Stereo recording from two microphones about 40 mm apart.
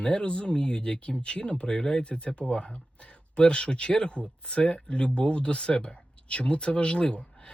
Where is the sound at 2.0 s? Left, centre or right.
Left.